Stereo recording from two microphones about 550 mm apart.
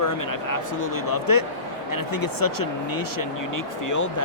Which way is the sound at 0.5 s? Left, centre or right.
Left.